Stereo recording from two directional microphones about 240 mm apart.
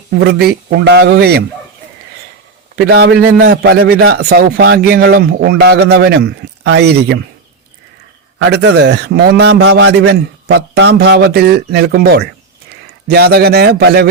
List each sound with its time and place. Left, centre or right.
0.2 s a man's voice: right
2.7 s a man's voice: right
8.4 s a man's voice: right